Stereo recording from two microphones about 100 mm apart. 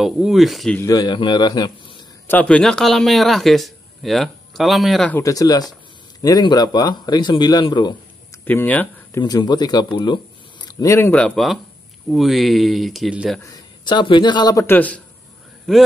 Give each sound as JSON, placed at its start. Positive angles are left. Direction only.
{"t": 0.0, "sound": "speech", "side_deg": -5}
{"t": 0.8, "sound": "speech", "side_deg": 35}
{"t": 1.1, "sound": "speech", "side_deg": 50}
{"t": 2.4, "sound": "speech", "side_deg": 10}
{"t": 5.2, "sound": "speech", "side_deg": 35}
{"t": 8.5, "sound": "speech", "side_deg": 15}
{"t": 9.2, "sound": "speech", "side_deg": 45}
{"t": 10.7, "sound": "speech", "side_deg": 30}
{"t": 11.1, "sound": "speech", "side_deg": 10}
{"t": 12.1, "sound": "speech", "side_deg": 0}
{"t": 13.4, "sound": "a man's voice", "side_deg": 40}
{"t": 14.7, "sound": "speech", "side_deg": 15}
{"t": 15.7, "sound": "speech", "side_deg": 0}